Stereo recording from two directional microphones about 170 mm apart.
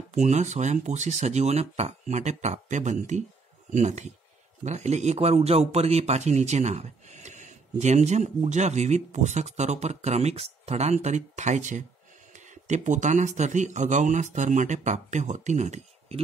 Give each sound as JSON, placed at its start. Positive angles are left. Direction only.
{"t": 0.1, "sound": "speech", "side_deg": -40}